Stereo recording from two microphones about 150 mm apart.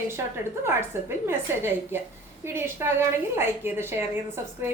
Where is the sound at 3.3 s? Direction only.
15° right (ahead or behind).